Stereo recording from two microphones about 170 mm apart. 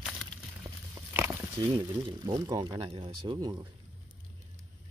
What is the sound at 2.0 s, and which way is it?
Speech, 25° right (ahead or behind).